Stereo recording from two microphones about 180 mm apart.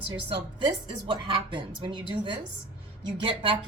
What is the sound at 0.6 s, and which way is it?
A woman's voice, 25° right (ahead or behind).